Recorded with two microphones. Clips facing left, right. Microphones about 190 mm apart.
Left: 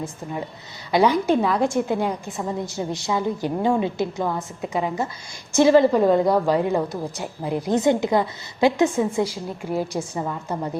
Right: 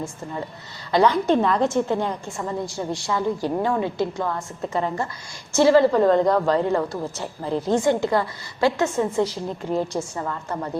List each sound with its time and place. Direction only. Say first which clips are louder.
0.9 s a woman's voice: even; 10° left (ahead or behind)